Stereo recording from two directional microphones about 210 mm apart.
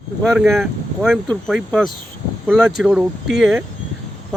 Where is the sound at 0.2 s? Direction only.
Centre (ahead or behind).